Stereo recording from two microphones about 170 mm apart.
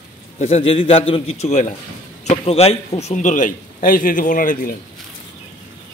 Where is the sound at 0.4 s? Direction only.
35° left (ahead or behind); by 4.7 s 55° left (ahead or behind).